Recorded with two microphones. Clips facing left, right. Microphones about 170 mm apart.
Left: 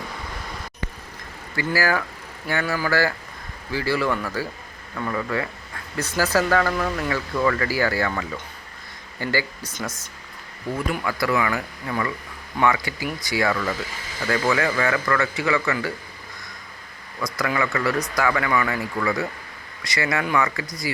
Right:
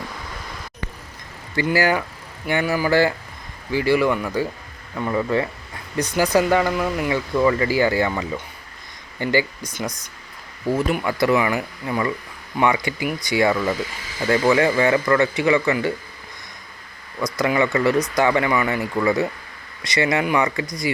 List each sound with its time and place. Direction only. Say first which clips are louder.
1.6 s speech: right 3 dB; 20° right (ahead or behind)
10.7 s speech: right 5 dB; 25° right (ahead or behind)
17.3 s speech: right 5 dB; 20° right (ahead or behind)